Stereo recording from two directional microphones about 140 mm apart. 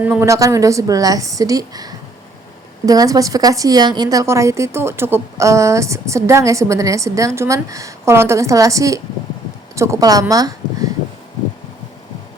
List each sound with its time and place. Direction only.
0.0 s a woman's voice: 15° right (ahead or behind)